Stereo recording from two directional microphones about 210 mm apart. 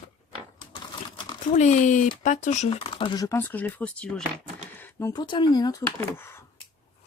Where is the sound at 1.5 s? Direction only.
35° left (ahead or behind); by 6.4 s 10° left (ahead or behind).